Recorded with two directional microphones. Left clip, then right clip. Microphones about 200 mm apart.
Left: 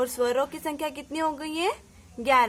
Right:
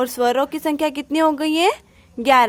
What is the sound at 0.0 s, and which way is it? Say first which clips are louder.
A woman's voice: right 7 dB; 45° right (ahead or behind).